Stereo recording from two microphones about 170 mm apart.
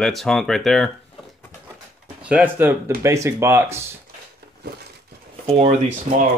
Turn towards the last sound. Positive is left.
turn(degrees=-45)  # may be behind; listen again after turning